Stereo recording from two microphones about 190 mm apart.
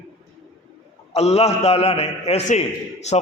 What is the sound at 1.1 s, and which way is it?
A man's voice, 35° left (ahead or behind).